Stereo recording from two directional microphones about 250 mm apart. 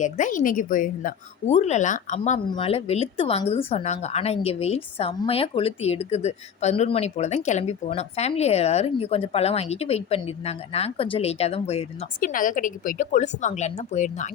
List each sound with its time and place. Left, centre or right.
0.0 s a woman's voice: left